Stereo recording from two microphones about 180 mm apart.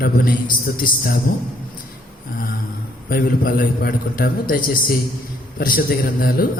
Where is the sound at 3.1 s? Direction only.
50° left (ahead or behind).